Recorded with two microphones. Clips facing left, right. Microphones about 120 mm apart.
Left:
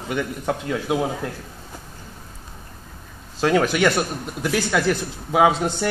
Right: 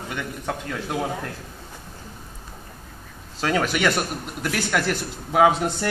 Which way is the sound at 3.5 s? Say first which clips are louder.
Left 4 dB; centre (ahead or behind).